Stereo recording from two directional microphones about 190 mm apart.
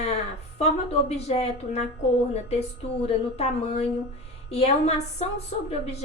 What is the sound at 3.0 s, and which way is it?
Speech, 30° left (ahead or behind).